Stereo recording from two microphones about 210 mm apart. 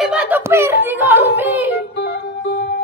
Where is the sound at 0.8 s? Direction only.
10° right (ahead or behind).